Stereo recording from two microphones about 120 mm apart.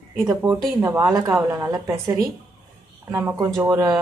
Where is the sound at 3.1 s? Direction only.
15° right (ahead or behind).